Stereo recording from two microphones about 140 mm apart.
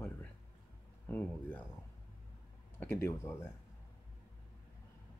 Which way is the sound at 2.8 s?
15° left (ahead or behind).